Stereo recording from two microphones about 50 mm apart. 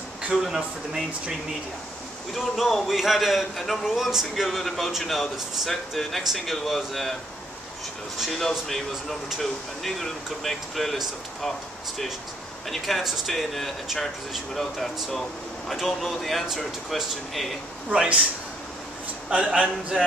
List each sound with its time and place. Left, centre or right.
0.3 s speech: centre
2.3 s speech: centre
8.3 s speech: centre
12.6 s speech: centre
17.8 s a man's voice: right
19.3 s a man's voice: right